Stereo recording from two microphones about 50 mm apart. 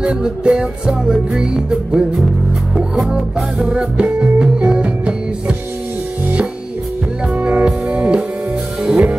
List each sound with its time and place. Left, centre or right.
0.1 s music: centre
7.3 s music: right
7.6 s music: right